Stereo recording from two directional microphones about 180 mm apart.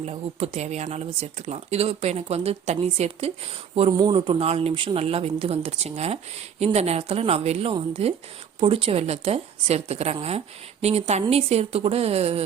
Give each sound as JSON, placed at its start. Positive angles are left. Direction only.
{"t": 0.0, "sound": "a woman's voice", "side_deg": -35}